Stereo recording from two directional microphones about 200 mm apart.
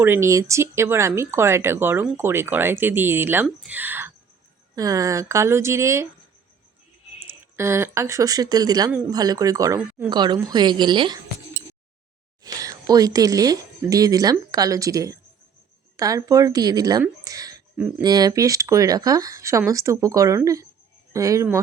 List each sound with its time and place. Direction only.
0.0 s speech: 10° right (ahead or behind)
7.2 s a woman's voice: 10° right (ahead or behind)
12.4 s speech: 20° right (ahead or behind)
17.7 s speech: 5° right (ahead or behind)
18.0 s speech: 20° right (ahead or behind)